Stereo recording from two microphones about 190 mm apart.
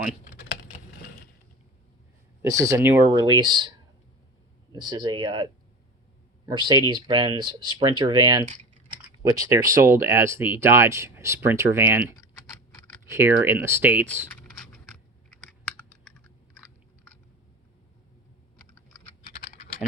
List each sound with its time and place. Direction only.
2.4 s speech: 15° right (ahead or behind)
4.7 s speech: 20° right (ahead or behind)
14.3 s a sound: 5° left (ahead or behind)